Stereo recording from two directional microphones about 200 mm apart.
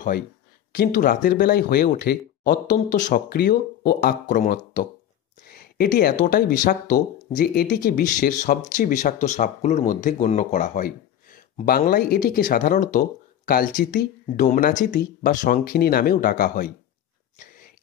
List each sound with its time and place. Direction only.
0.7 s speech: 45° left (ahead or behind)
3.3 s speech: 50° left (ahead or behind)